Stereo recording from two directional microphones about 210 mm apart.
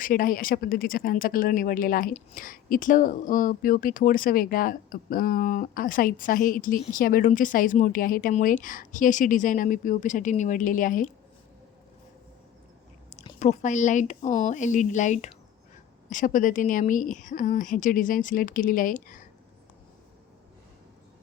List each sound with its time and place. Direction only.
0.0 s speech: 45° left (ahead or behind)
13.1 s speech: 30° left (ahead or behind)